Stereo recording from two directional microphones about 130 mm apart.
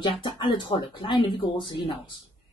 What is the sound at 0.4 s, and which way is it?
Speech, 40° left (ahead or behind).